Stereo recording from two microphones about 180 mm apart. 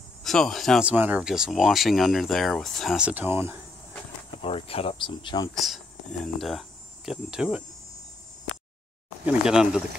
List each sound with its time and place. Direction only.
0.2 s speech: centre (ahead or behind)
4.4 s speech: 30° left (ahead or behind)
5.5 s speech: centre (ahead or behind)
9.2 s speech: 5° right (ahead or behind)